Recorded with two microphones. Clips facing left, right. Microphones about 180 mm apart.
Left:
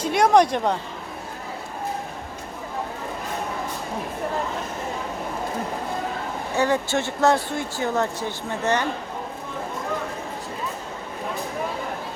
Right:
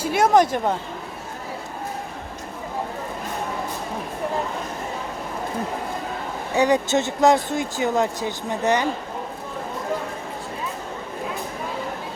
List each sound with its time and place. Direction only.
0.0 s a woman's voice: 5° right (ahead or behind)
6.6 s speech: 15° right (ahead or behind)